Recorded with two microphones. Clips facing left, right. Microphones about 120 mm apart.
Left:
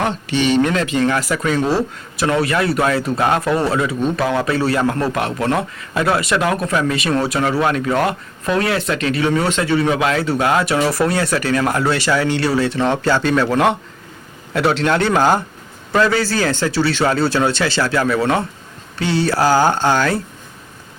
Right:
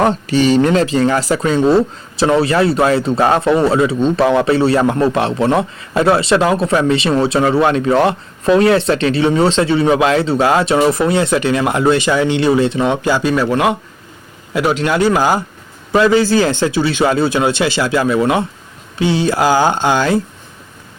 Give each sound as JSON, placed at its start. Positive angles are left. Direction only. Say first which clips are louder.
{"t": 0.0, "sound": "speech", "louder": "right 5 dB", "side_deg": -40}
{"t": 15.9, "sound": "speech", "louder": "right 5 dB", "side_deg": -20}